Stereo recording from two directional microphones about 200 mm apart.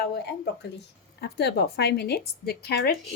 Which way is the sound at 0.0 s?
55° left (ahead or behind).